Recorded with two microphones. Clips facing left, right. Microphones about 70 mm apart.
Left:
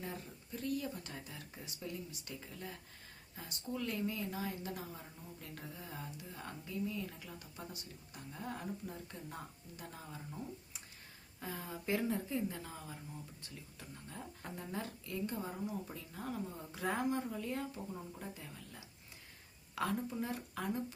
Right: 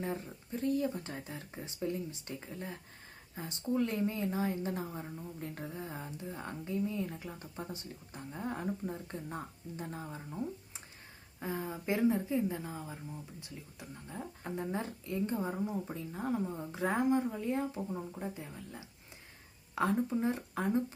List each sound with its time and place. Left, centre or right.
0.0 s a woman's voice: right
11.3 s speech: right